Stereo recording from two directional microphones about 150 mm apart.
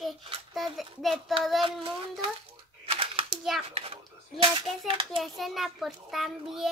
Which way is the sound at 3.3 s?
Centre (ahead or behind).